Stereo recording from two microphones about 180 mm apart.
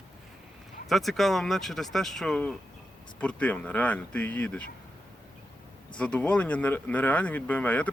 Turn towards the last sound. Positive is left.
turn(degrees=10)  # may be behind; listen again after turning